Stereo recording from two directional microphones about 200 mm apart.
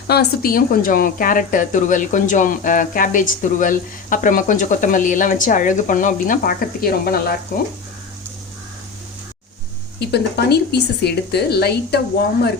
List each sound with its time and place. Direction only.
0.1 s speech: 50° left (ahead or behind)
10.0 s speech: 55° left (ahead or behind)